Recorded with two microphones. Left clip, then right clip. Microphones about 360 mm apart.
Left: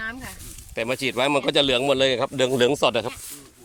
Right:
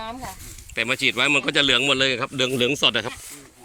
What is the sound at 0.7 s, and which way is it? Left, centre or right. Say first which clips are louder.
A man's voice: right 3 dB; centre.